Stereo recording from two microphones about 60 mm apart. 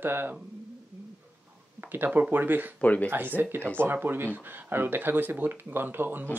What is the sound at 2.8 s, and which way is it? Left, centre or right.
Speech, left.